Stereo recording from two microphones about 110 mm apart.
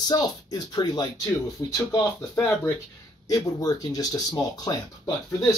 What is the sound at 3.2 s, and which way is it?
Speech, 35° left (ahead or behind).